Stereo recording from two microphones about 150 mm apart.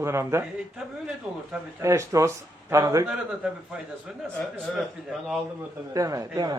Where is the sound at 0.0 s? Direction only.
20° right (ahead or behind).